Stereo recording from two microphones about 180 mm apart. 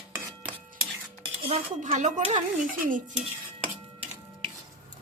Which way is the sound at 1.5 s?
40° right (ahead or behind).